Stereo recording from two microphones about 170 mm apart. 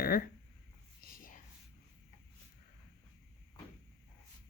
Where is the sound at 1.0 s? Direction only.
55° left (ahead or behind).